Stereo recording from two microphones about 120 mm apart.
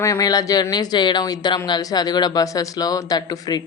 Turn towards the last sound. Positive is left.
turn(degrees=30)  # may be behind; listen again after turning